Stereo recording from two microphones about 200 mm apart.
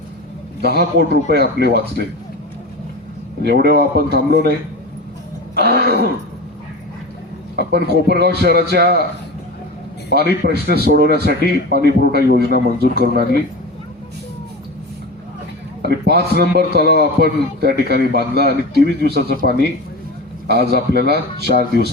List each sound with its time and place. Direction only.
0.6 s a man's voice: 55° right (ahead or behind)
3.6 s a man's voice: 55° right (ahead or behind)
5.5 s a sound: 50° right (ahead or behind)
7.5 s a man's voice: 55° right (ahead or behind)
10.2 s a man's voice: 55° right (ahead or behind)
15.8 s a man's voice: 55° right (ahead or behind)